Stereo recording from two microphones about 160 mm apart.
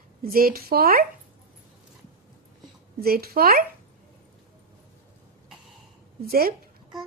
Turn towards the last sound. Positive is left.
turn(degrees=-70)  # may be behind; listen again after turning